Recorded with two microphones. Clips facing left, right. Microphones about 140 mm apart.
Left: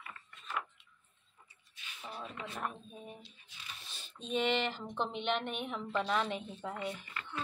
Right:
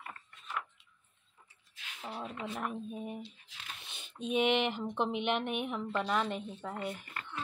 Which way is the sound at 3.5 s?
85° right.